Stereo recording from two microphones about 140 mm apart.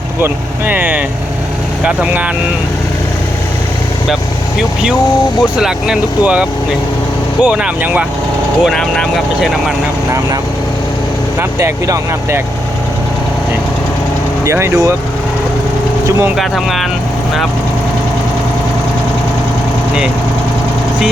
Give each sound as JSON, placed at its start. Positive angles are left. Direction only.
{"t": 0.7, "sound": "speech", "side_deg": -10}
{"t": 5.4, "sound": "speech", "side_deg": -5}
{"t": 8.6, "sound": "speech", "side_deg": 5}
{"t": 11.3, "sound": "speech", "side_deg": -20}
{"t": 14.4, "sound": "speech", "side_deg": -20}
{"t": 16.0, "sound": "speech", "side_deg": -20}
{"t": 16.3, "sound": "speech", "side_deg": 0}